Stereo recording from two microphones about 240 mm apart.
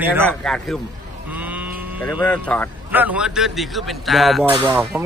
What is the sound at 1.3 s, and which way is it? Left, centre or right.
Sheep, centre.